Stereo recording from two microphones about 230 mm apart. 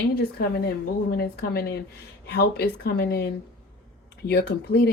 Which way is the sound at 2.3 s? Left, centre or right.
Left.